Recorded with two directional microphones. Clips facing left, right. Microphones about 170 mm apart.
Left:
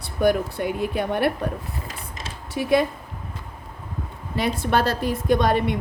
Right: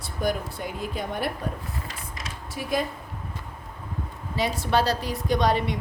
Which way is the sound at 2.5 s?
70° left (ahead or behind).